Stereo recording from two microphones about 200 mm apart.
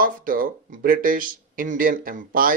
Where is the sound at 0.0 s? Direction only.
45° right (ahead or behind).